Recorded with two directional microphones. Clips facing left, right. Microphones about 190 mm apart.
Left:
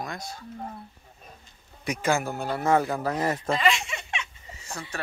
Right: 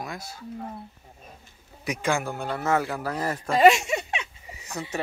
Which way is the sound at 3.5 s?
45° right (ahead or behind).